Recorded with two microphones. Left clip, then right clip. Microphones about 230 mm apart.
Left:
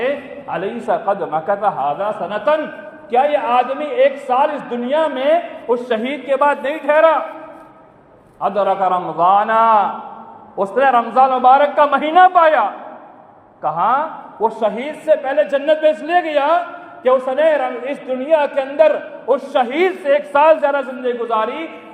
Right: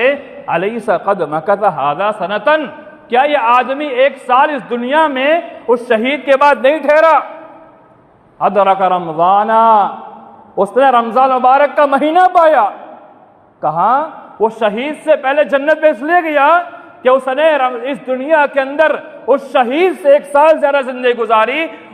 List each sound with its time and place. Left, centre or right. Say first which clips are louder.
0.0 s a man's voice: right 7 dB; right
5.2 s a man's voice: right 3 dB; right
8.4 s a man's voice: right 6 dB; right
16.2 s a man's voice: right 5 dB; right
17.0 s a man's voice: right 3 dB; right